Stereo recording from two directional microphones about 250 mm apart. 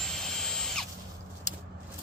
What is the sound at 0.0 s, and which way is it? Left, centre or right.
Drill, centre.